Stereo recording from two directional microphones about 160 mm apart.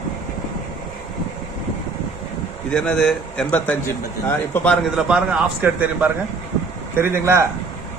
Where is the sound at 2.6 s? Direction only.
5° left (ahead or behind).